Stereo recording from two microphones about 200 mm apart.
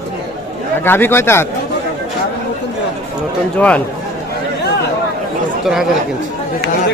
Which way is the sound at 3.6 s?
5° left (ahead or behind).